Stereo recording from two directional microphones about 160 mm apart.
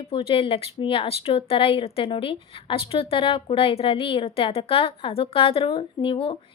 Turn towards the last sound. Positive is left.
turn(degrees=30)  # may be behind; listen again after turning